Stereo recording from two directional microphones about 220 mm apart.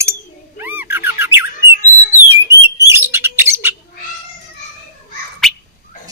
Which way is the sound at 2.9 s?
10° right (ahead or behind).